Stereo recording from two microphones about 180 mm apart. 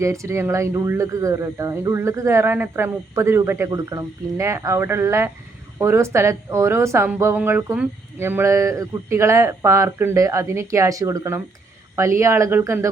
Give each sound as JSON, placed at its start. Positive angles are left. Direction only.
{"t": 0.0, "sound": "a woman's voice", "side_deg": -15}